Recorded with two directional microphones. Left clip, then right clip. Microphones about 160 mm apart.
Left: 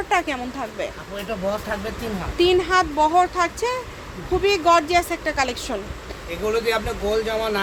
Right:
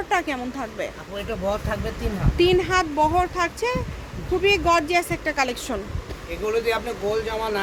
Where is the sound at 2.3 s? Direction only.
10° right (ahead or behind).